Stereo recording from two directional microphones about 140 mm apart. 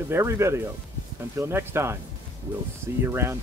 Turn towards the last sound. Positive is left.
turn(degrees=-15)  # may be behind; listen again after turning